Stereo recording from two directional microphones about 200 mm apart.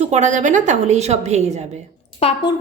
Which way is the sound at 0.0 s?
35° right (ahead or behind).